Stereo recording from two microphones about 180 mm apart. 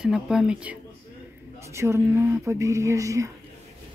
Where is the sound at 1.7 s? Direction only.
15° right (ahead or behind).